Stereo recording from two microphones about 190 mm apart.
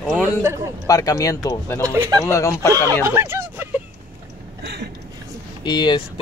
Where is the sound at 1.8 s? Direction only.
15° right (ahead or behind).